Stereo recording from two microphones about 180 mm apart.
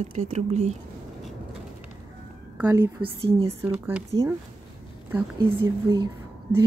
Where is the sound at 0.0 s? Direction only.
40° right (ahead or behind).